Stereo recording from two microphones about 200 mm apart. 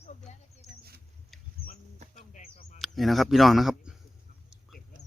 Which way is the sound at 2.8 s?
Centre (ahead or behind).